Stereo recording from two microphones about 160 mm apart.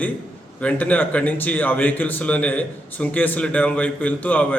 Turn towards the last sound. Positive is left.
turn(degrees=10)  # may be behind; listen again after turning